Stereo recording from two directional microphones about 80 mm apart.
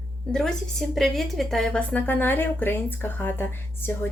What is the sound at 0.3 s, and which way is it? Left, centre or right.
A woman's voice, centre.